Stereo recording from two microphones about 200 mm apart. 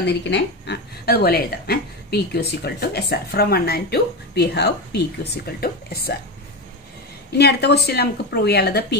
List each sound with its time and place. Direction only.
0.0 s speech: 60° left (ahead or behind)
7.3 s a woman's voice: 55° left (ahead or behind)